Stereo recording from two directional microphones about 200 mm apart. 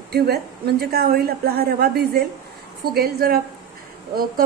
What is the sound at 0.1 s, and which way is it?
A woman's voice, 50° right (ahead or behind).